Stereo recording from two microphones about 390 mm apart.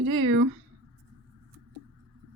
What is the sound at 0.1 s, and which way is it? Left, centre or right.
Speech, right.